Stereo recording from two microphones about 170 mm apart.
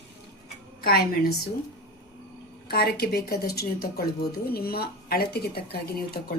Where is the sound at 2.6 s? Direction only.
70° left (ahead or behind).